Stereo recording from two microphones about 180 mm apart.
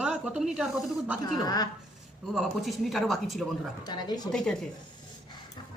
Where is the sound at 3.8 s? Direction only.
20° left (ahead or behind).